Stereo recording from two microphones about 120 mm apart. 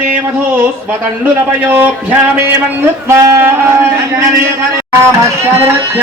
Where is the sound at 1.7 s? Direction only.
15° right (ahead or behind).